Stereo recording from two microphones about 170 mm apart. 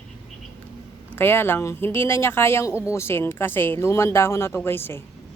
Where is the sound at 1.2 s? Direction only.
10° left (ahead or behind).